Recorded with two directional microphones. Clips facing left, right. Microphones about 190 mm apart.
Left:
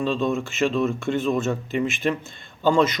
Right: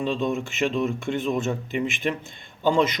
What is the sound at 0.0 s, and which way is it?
Speech, 15° right (ahead or behind).